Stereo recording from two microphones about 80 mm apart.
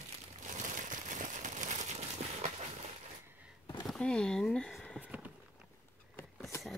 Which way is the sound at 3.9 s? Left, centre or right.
Centre.